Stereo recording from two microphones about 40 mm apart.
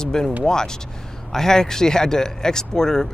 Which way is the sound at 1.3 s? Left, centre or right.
Centre.